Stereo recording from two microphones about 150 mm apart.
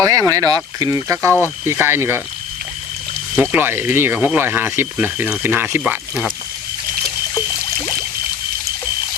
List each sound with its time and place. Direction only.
0.0 s speech: 25° right (ahead or behind)
3.3 s speech: 10° right (ahead or behind)